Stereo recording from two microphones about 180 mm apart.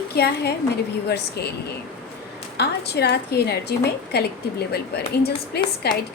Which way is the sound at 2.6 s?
65° left (ahead or behind).